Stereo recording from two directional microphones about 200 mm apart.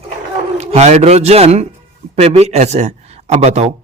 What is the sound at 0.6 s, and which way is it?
A man's voice, 35° right (ahead or behind).